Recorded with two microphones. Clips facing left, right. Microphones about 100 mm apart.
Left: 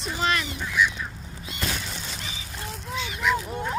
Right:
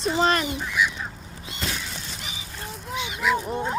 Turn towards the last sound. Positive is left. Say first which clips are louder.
# right 2 dB
turn(degrees=-15)  # may be behind; listen again after turning